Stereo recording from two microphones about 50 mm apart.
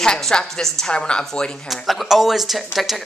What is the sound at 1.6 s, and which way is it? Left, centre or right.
Speech, centre.